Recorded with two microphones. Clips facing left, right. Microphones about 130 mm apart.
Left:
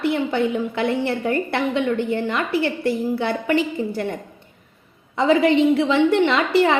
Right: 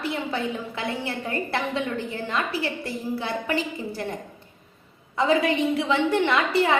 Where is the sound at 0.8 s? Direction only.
25° left (ahead or behind).